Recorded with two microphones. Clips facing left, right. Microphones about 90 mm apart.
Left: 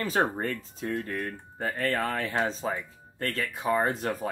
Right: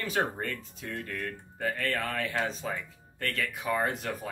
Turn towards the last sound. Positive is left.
turn(degrees=35)  # may be behind; listen again after turning